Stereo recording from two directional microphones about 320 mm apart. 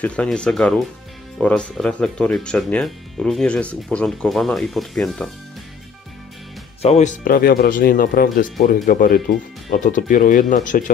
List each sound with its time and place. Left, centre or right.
0.0 s speech: centre
6.8 s speech: left